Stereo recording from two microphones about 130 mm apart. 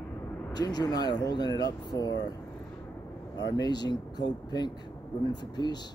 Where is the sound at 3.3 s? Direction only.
30° left (ahead or behind).